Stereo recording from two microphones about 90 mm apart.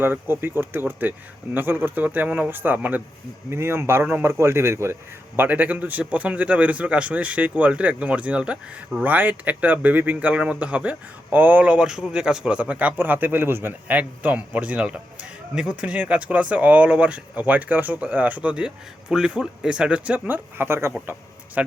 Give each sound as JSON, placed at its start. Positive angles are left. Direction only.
{"t": 0.0, "sound": "a man's voice", "side_deg": -25}